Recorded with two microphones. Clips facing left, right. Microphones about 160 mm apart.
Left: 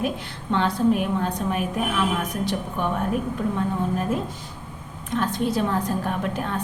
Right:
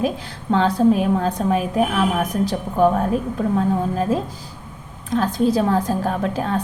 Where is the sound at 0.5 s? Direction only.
35° right (ahead or behind).